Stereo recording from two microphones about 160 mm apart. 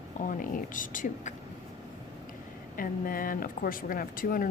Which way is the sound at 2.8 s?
60° left (ahead or behind).